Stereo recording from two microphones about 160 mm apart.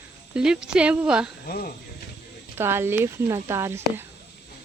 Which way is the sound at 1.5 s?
70° left (ahead or behind).